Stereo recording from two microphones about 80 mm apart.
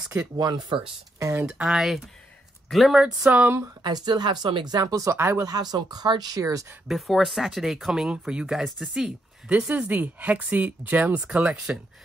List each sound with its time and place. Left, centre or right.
0.4 s speech: right
1.5 s speech: centre
3.3 s speech: right
3.8 s speech: right
4.7 s speech: right
6.9 s speech: centre
9.6 s speech: centre